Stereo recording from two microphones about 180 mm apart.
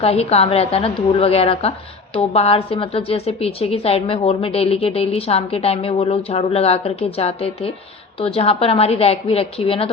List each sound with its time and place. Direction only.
0.0 s a woman's voice: 35° left (ahead or behind)